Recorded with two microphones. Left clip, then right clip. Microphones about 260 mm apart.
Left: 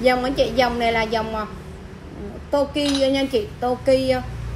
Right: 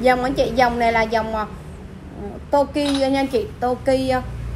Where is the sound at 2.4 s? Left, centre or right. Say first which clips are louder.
Right 2 dB; centre.